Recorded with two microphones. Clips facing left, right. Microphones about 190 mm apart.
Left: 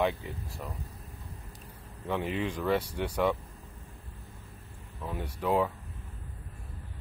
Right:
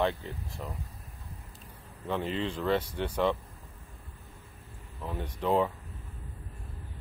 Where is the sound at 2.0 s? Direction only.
15° left (ahead or behind).